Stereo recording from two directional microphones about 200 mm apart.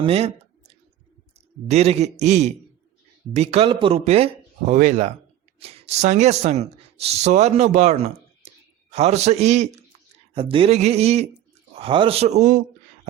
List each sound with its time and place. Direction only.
0.0 s speech: 30° right (ahead or behind)
1.7 s speech: 30° right (ahead or behind)